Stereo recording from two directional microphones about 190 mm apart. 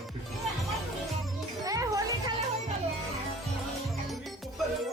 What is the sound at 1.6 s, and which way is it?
Music, 20° right (ahead or behind).